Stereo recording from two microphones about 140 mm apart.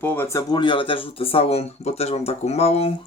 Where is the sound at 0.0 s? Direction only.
15° left (ahead or behind).